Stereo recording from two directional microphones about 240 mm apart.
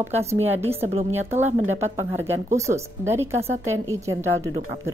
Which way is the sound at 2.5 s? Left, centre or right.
Centre.